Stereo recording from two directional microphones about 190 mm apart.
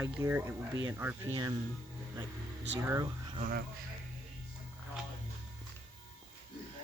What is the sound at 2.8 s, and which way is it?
Speech, 15° right (ahead or behind).